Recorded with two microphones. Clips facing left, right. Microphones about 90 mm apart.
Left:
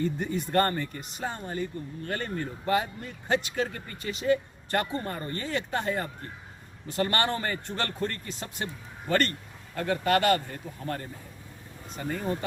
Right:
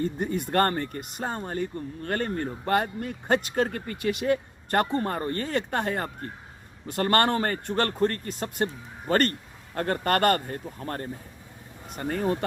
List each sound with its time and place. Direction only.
0.0 s speech: 45° right (ahead or behind)
11.9 s speech: 55° right (ahead or behind)